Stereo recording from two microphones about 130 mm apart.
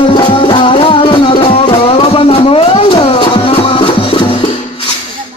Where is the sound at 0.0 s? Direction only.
40° left (ahead or behind).